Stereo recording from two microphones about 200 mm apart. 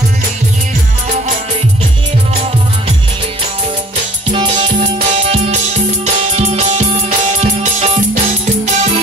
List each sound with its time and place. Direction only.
4.3 s music: 25° right (ahead or behind)